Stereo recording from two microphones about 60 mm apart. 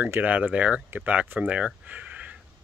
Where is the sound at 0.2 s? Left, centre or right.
Right.